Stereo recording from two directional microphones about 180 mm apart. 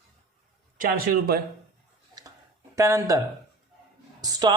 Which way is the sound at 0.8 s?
55° right (ahead or behind).